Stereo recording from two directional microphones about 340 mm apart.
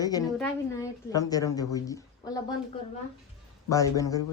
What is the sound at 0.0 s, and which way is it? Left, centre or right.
A woman's voice, centre.